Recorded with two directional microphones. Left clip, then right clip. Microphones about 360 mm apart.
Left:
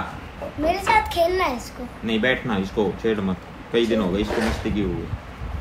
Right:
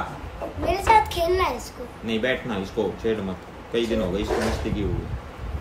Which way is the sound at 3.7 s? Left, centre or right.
Centre.